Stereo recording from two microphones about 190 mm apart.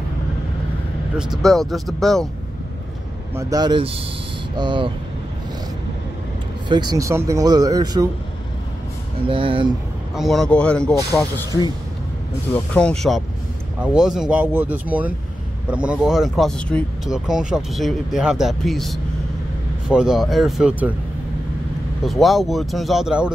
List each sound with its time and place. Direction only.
1.1 s speech: centre (ahead or behind)
3.3 s speech: 20° right (ahead or behind)
6.7 s speech: 20° right (ahead or behind)
9.3 s speech: 25° right (ahead or behind)
10.1 s speech: centre (ahead or behind)
11.1 s speech: 20° left (ahead or behind)
12.7 s speech: 5° left (ahead or behind)
22.0 s speech: centre (ahead or behind)